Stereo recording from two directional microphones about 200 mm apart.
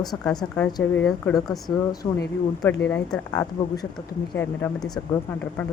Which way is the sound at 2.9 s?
10° left (ahead or behind).